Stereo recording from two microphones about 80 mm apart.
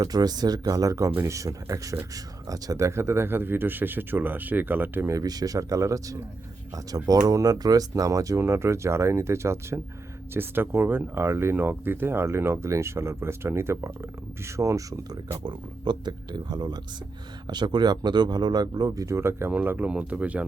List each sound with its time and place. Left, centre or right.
0.0 s speech: right
5.0 s speech: right
15.4 s speech: right; by 20.4 s centre